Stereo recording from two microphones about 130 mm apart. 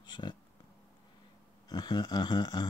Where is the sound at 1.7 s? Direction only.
35° left (ahead or behind).